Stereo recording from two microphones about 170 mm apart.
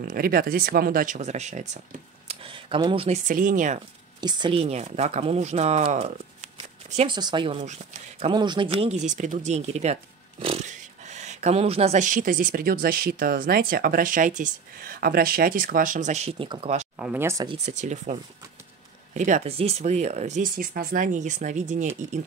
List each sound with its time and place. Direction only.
0.0 s speech: 60° right (ahead or behind); by 1.8 s 45° right (ahead or behind)
2.2 s a sound: 30° right (ahead or behind)
3.3 s speech: 50° right (ahead or behind)
4.2 s a woman's voice: 25° right (ahead or behind)
7.1 s a woman's voice: 25° right (ahead or behind)
17.0 s speech: 10° right (ahead or behind)
17.6 s speech: 45° right (ahead or behind)